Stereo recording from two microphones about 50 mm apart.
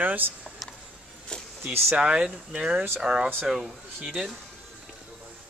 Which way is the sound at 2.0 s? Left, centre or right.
Right.